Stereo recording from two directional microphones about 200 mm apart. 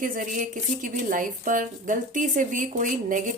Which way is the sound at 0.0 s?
40° right (ahead or behind).